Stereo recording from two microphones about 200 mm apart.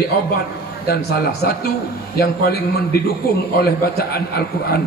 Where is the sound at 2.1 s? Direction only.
50° left (ahead or behind).